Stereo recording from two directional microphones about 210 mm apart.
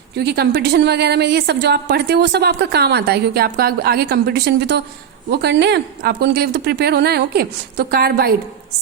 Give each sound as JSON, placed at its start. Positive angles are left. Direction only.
{"t": 0.2, "sound": "a woman's voice", "side_deg": -50}